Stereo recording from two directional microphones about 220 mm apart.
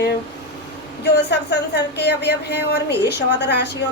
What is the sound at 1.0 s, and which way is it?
Speech, 50° left (ahead or behind).